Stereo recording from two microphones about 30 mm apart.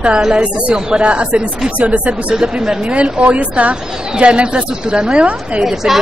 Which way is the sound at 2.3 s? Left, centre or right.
Right.